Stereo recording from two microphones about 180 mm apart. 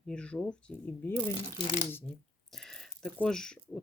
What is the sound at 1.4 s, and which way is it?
Speech, 30° left (ahead or behind).